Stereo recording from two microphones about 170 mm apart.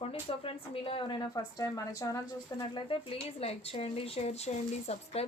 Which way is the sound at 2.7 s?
35° left (ahead or behind).